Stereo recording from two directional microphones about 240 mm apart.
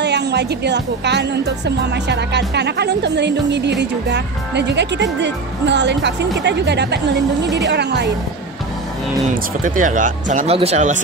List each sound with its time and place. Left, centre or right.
0.0 s speech: right
9.3 s speech: right